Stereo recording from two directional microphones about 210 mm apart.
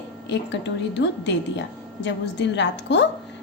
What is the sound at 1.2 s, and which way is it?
A woman's voice, 60° left (ahead or behind).